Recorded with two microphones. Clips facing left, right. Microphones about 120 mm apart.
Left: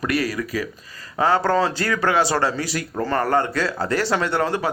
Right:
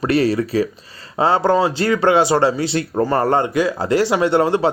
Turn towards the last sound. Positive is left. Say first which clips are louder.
# right 6 dB
turn(degrees=-20)  # may be behind; listen again after turning